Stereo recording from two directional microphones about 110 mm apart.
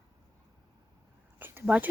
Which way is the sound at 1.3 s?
20° right (ahead or behind).